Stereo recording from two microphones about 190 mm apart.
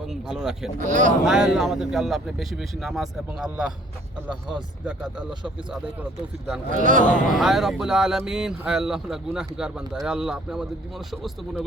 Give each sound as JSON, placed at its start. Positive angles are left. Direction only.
{"t": 0.1, "sound": "speech", "side_deg": 0}
{"t": 0.8, "sound": "speech", "side_deg": -40}
{"t": 1.2, "sound": "speech", "side_deg": -5}
{"t": 5.7, "sound": "speech", "side_deg": -5}
{"t": 6.7, "sound": "a man's voice", "side_deg": -45}
{"t": 7.0, "sound": "speech", "side_deg": 0}